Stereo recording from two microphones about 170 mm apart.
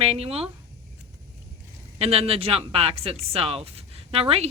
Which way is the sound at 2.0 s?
35° right (ahead or behind).